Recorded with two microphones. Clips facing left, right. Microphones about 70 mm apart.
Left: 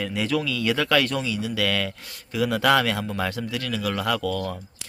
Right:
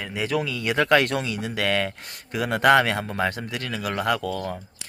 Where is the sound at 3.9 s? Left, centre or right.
Right.